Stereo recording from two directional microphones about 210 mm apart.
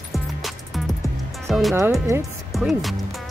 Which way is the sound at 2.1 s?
10° right (ahead or behind).